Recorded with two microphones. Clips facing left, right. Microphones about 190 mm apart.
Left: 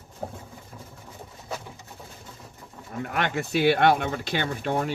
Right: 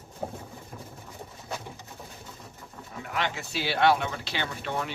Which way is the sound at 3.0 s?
55° left (ahead or behind).